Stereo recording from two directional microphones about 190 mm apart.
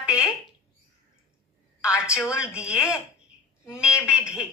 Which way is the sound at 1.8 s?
5° right (ahead or behind).